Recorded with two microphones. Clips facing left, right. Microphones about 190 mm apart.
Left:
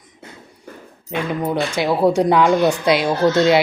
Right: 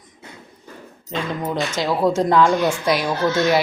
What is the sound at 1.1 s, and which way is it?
A woman's voice, 15° left (ahead or behind).